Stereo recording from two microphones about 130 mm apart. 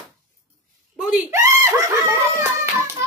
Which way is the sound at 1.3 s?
20° right (ahead or behind).